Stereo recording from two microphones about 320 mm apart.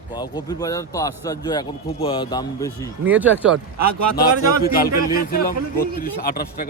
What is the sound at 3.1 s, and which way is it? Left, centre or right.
Speech, centre.